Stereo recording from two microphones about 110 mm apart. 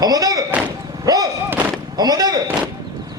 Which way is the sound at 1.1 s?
35° right (ahead or behind).